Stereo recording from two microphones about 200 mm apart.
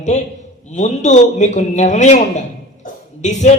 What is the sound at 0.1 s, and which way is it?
A man's voice, 35° left (ahead or behind).